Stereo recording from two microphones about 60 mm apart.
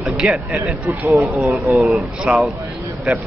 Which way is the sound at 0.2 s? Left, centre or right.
Right.